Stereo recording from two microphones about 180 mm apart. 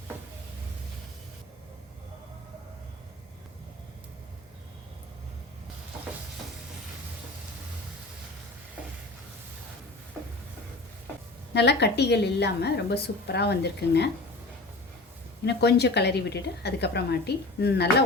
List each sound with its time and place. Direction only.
11.5 s a woman's voice: 70° left (ahead or behind)
15.4 s a woman's voice: 70° left (ahead or behind)